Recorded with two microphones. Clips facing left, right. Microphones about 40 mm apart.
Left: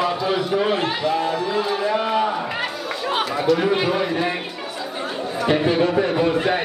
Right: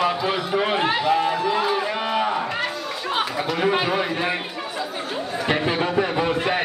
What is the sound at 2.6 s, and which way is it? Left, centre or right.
Chatter, centre.